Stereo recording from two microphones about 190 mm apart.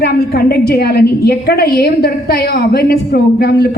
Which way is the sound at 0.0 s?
55° left (ahead or behind).